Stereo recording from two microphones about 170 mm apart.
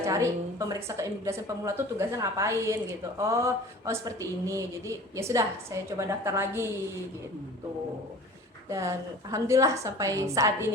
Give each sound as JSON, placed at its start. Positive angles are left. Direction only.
{"t": 0.0, "sound": "speech", "side_deg": -20}
{"t": 8.7, "sound": "a woman's voice", "side_deg": -20}